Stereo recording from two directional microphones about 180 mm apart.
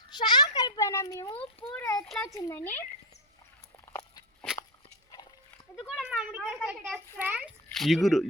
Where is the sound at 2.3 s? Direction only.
15° left (ahead or behind).